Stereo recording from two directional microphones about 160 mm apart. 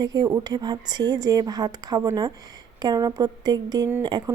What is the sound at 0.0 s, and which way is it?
A woman's voice, 25° right (ahead or behind).